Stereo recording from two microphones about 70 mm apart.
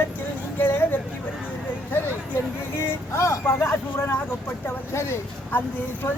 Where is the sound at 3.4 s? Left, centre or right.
Left.